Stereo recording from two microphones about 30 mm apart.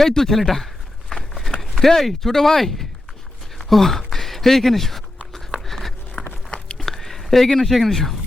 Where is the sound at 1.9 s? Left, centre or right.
Centre.